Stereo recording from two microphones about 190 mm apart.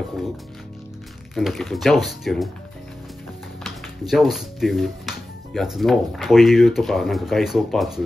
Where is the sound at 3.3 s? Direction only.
Centre (ahead or behind).